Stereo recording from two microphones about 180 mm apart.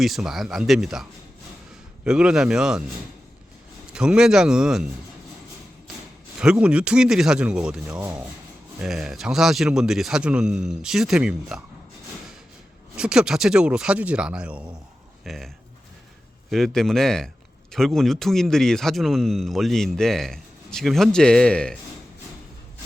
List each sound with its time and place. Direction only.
0.0 s a man's voice: centre (ahead or behind)
2.0 s a man's voice: 5° right (ahead or behind)
3.9 s a man's voice: 5° right (ahead or behind)
6.4 s a man's voice: 5° right (ahead or behind)
13.0 s a man's voice: 5° right (ahead or behind)
16.5 s a man's voice: centre (ahead or behind)